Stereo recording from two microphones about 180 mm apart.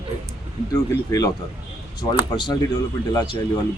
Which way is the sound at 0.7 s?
20° left (ahead or behind).